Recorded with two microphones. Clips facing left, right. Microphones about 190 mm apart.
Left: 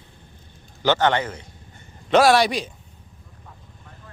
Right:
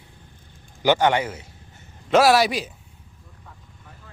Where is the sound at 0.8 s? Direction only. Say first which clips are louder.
Right 1 dB; 10° right (ahead or behind).